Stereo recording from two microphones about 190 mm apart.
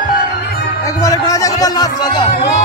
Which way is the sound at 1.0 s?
15° left (ahead or behind).